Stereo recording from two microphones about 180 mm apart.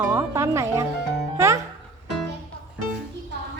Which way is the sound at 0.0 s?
15° right (ahead or behind).